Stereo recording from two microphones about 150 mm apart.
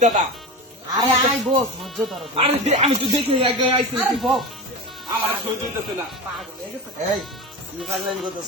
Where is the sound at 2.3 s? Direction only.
45° right (ahead or behind).